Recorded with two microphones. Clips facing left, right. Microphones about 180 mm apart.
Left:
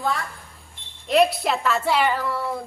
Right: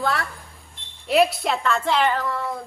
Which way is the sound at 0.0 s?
70° right (ahead or behind).